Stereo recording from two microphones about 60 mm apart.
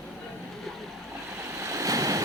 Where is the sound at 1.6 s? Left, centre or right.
Right.